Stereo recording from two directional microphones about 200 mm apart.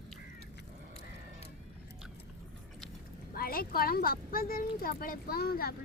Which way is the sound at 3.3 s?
50° left (ahead or behind).